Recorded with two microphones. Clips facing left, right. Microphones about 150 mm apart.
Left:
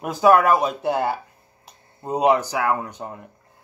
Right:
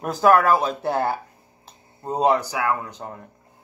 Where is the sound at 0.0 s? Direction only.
5° left (ahead or behind).